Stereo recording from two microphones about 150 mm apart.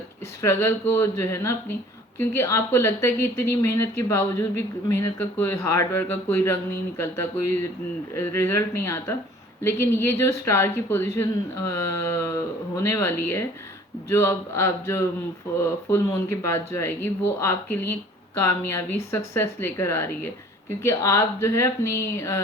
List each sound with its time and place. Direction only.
0.4 s speech: 15° left (ahead or behind)